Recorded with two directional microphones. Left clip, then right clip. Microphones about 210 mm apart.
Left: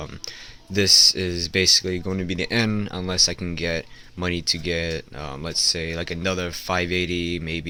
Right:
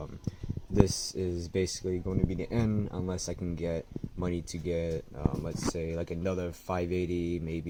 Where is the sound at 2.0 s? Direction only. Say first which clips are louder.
Left 8 dB; 25° left (ahead or behind).